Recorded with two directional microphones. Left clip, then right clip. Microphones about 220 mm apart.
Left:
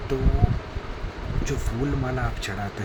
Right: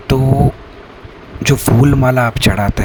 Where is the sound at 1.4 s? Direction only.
45° right (ahead or behind).